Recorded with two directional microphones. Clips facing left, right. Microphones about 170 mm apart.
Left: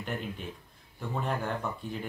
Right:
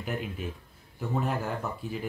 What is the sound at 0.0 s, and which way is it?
Speech, 5° right (ahead or behind).